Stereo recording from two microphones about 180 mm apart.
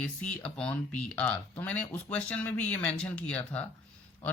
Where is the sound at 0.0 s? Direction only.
5° left (ahead or behind).